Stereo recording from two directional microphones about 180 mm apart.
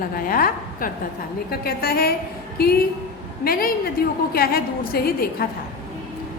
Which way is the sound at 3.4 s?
55° left (ahead or behind).